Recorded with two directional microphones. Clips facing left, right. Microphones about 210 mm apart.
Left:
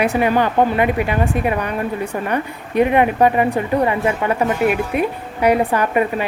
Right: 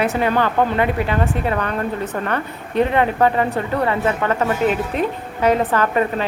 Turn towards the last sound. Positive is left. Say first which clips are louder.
# left 1 dB
turn(degrees=15)  # may be behind; listen again after turning